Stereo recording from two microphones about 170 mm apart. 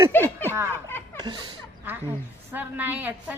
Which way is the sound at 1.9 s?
10° right (ahead or behind).